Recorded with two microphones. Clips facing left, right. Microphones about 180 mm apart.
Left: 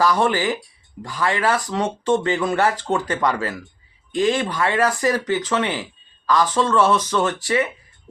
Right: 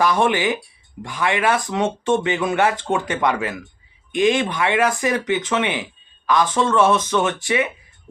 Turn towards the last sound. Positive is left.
turn(degrees=-15)  # may be behind; listen again after turning